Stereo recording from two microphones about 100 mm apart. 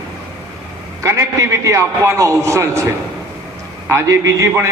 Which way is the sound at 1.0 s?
30° right (ahead or behind).